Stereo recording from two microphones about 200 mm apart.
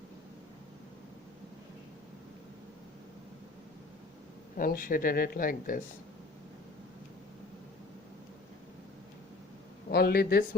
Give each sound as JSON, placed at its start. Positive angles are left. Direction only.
{"t": 4.5, "sound": "speech", "side_deg": 45}
{"t": 9.9, "sound": "speech", "side_deg": 50}